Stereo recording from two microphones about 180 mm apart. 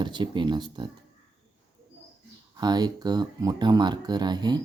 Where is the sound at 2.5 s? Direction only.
20° right (ahead or behind).